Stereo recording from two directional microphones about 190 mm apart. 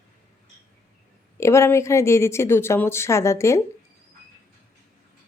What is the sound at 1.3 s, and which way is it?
Speech, 15° left (ahead or behind).